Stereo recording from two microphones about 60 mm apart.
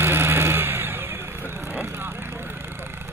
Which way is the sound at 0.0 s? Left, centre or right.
Right.